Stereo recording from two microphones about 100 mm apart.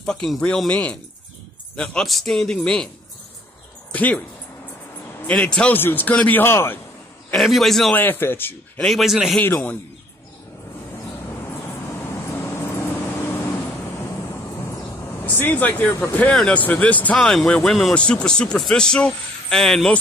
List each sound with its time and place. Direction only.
0.0 s speech: 5° left (ahead or behind)
3.9 s speech: 15° left (ahead or behind)
5.2 s speech: 10° left (ahead or behind)
7.3 s speech: centre (ahead or behind)
7.9 s speech: 20° left (ahead or behind)
8.7 s speech: 5° left (ahead or behind)
9.4 s speech: 15° left (ahead or behind)
12.3 s vehicle: 25° left (ahead or behind)
15.2 s speech: 20° left (ahead or behind); by 17.9 s centre (ahead or behind)
17.9 s speech: 10° left (ahead or behind)